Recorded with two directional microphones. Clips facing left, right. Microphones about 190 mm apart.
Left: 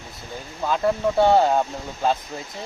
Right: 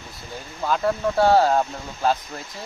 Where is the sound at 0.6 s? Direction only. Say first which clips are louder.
Left 1 dB; 5° left (ahead or behind).